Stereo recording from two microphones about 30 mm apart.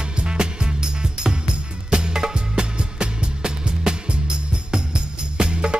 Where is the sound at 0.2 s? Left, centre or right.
Right.